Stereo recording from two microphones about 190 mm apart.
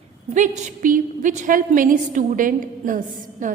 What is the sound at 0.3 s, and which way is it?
A woman's voice, 40° right (ahead or behind).